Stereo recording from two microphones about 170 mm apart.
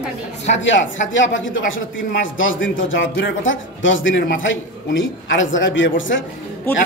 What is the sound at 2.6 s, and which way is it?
Speech, 90° left.